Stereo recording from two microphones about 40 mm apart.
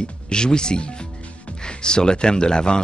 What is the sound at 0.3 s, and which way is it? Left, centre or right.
Speech, left.